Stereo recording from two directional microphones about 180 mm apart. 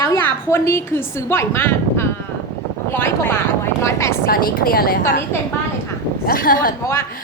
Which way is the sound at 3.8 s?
15° left (ahead or behind).